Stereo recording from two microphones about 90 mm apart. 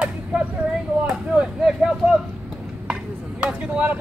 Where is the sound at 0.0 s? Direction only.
15° right (ahead or behind).